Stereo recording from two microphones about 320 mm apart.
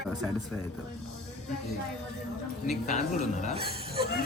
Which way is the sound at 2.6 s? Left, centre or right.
Left.